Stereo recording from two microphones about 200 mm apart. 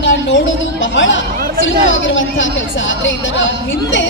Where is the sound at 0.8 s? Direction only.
70° left (ahead or behind).